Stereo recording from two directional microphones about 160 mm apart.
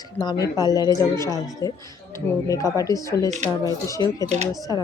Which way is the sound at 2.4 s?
20° left (ahead or behind).